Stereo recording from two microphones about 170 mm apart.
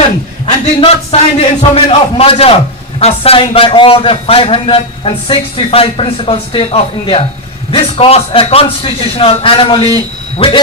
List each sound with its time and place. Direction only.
0.4 s a man's voice: 30° left (ahead or behind)